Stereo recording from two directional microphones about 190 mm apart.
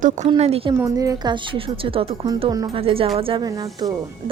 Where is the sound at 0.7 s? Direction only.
15° right (ahead or behind).